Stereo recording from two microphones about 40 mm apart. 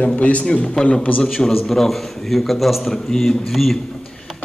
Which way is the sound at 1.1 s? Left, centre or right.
Left.